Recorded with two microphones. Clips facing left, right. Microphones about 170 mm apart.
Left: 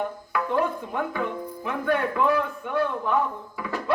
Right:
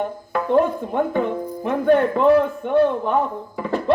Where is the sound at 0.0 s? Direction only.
40° right (ahead or behind).